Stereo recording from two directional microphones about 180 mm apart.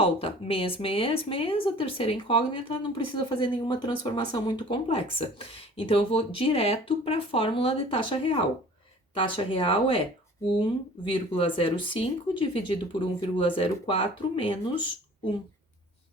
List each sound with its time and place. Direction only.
0.0 s speech: 30° left (ahead or behind)
11.1 s speech: 30° left (ahead or behind)